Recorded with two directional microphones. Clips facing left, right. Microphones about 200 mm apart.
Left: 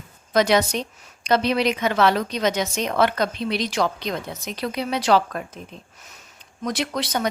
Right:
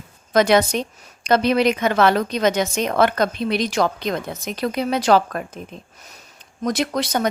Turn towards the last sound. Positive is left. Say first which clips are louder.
# right 3 dB
turn(degrees=-45)  # may be behind; listen again after turning